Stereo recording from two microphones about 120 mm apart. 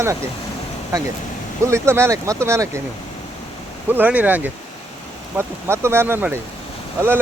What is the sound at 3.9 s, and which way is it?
Speech, 15° right (ahead or behind).